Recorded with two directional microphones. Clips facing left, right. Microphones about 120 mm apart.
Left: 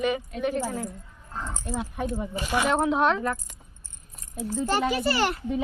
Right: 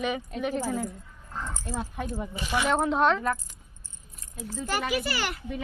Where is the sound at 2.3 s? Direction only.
50° left (ahead or behind).